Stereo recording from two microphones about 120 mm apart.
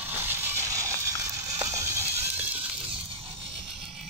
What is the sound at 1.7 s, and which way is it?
Goat, 25° right (ahead or behind).